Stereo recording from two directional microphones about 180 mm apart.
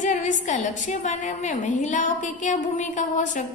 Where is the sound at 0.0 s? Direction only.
45° left (ahead or behind).